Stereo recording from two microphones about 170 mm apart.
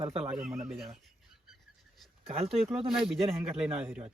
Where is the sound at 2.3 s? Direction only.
35° right (ahead or behind).